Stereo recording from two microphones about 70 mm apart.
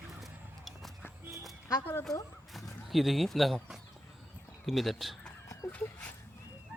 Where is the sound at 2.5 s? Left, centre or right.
Centre.